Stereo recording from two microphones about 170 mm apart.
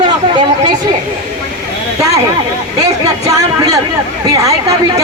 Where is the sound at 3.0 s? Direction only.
20° right (ahead or behind).